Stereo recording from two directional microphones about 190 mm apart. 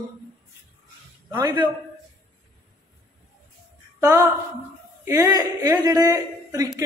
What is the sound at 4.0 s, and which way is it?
A man's voice, 15° right (ahead or behind).